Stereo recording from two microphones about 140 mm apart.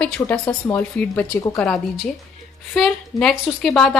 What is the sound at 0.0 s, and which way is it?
A woman's voice, 10° left (ahead or behind).